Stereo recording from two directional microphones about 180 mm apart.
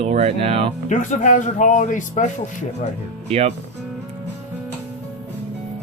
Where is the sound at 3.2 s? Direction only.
35° right (ahead or behind).